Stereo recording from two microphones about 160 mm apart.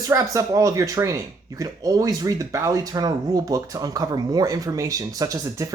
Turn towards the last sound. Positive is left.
turn(degrees=-20)  # may be behind; listen again after turning